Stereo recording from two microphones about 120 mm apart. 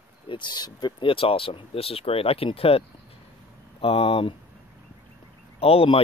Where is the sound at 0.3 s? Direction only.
40° left (ahead or behind).